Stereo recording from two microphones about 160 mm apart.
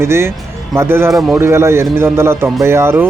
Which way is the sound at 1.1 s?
Centre (ahead or behind).